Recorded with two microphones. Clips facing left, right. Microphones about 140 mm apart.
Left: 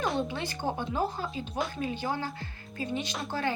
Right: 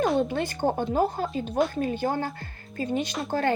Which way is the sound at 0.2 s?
50° right (ahead or behind).